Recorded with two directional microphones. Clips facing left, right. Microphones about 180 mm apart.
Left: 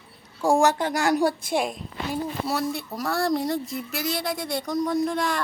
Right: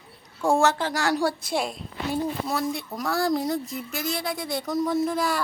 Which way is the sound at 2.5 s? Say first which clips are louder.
Left 1 dB; centre (ahead or behind).